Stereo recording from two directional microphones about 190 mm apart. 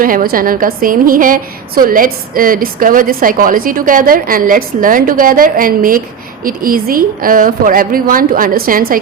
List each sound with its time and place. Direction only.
0.0 s a woman's voice: 50° right (ahead or behind)